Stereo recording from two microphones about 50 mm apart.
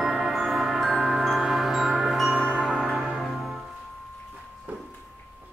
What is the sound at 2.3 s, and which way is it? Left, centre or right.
Music, centre.